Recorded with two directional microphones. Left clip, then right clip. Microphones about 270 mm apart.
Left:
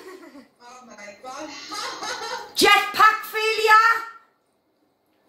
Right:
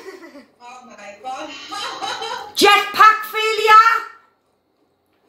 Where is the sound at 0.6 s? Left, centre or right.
Centre.